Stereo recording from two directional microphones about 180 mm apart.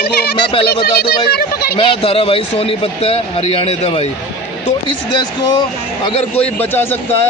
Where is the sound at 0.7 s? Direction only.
60° left (ahead or behind).